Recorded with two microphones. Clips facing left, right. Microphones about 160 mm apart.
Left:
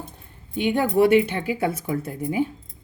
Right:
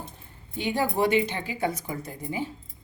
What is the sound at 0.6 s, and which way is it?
A woman's voice, 60° left (ahead or behind).